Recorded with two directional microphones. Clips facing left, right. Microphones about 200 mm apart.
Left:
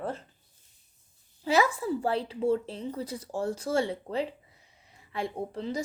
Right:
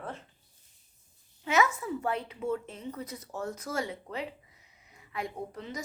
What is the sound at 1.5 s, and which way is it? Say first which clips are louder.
A woman's voice: left 3 dB; 30° left (ahead or behind).